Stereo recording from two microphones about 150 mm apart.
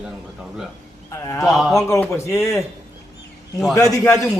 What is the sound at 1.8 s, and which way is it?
Speech, 20° left (ahead or behind).